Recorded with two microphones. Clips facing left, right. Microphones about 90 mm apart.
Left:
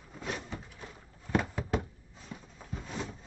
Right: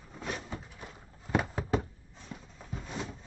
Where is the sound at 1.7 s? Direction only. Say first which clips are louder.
Right 2 dB; centre (ahead or behind).